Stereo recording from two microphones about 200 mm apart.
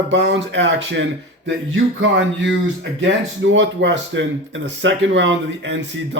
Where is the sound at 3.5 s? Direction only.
65° right (ahead or behind).